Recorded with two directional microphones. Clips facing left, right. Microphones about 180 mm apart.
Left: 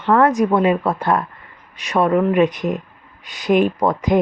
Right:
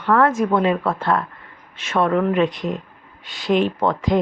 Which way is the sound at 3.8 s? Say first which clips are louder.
Left 2 dB; 15° left (ahead or behind).